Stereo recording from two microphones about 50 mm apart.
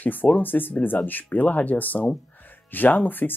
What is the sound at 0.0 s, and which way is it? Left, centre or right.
Speech, left.